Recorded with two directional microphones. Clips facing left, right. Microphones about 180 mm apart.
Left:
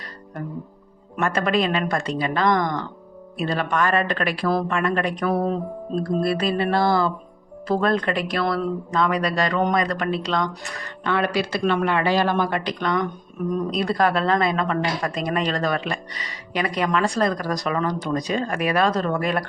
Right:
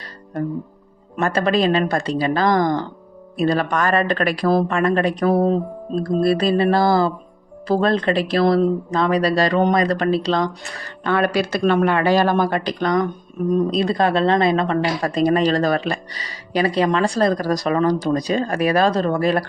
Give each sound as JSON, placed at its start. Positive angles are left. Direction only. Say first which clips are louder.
{"t": 1.2, "sound": "speech", "louder": "right 3 dB", "side_deg": -35}
{"t": 6.2, "sound": "speech", "louder": "right 5 dB", "side_deg": -35}
{"t": 13.8, "sound": "speech", "louder": "right 3 dB", "side_deg": -25}